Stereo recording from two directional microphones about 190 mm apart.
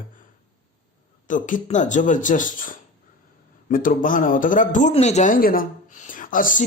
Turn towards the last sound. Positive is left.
turn(degrees=45)  # may be behind; listen again after turning